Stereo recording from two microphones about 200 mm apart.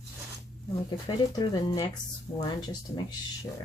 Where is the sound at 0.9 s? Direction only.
20° left (ahead or behind).